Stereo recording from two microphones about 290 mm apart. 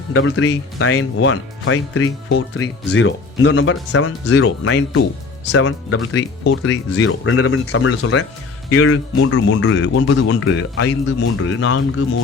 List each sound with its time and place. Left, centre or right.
0.1 s speech: left